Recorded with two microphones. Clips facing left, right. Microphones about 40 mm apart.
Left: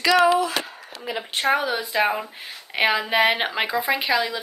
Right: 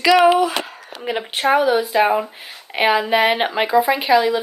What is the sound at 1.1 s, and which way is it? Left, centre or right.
Speech, right.